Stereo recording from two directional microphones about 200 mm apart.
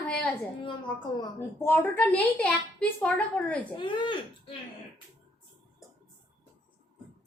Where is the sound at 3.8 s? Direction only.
25° left (ahead or behind).